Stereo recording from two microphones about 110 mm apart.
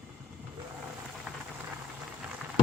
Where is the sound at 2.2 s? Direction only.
15° right (ahead or behind).